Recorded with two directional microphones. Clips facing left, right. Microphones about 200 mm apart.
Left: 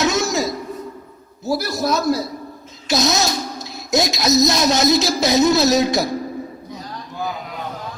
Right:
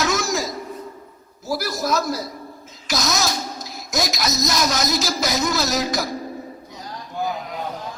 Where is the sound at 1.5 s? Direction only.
25° left (ahead or behind).